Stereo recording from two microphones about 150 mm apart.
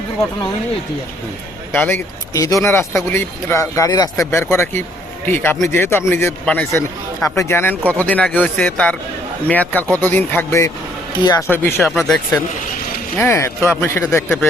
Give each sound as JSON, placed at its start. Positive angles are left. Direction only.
{"t": 1.7, "sound": "speech", "side_deg": 10}
{"t": 11.4, "sound": "speech", "side_deg": 15}
{"t": 11.9, "sound": "speech", "side_deg": 0}
{"t": 13.1, "sound": "speech", "side_deg": 15}